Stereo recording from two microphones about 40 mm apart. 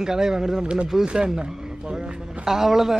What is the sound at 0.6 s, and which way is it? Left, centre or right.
A man's voice, right.